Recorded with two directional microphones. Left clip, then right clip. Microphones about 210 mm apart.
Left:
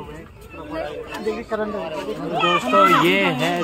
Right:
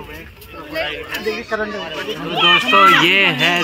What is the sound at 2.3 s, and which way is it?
A child's voice, 25° right (ahead or behind).